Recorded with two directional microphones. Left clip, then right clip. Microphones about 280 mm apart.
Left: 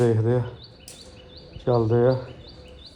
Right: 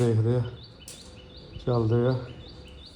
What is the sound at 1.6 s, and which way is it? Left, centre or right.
Speech, left.